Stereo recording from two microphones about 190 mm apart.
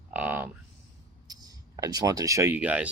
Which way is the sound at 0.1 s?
10° right (ahead or behind).